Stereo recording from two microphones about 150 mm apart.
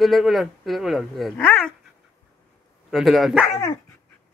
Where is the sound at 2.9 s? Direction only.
Centre (ahead or behind).